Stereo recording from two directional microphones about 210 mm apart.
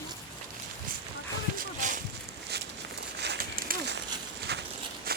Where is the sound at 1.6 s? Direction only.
40° right (ahead or behind).